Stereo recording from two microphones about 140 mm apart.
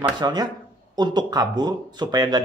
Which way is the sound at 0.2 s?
30° right (ahead or behind).